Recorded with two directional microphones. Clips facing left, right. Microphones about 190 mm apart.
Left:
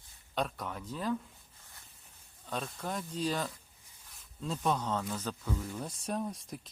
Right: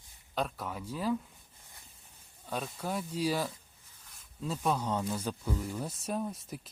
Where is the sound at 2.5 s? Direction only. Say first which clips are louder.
Right 2 dB; 5° right (ahead or behind).